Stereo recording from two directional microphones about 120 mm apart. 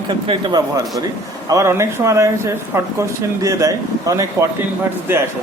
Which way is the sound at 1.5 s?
25° right (ahead or behind).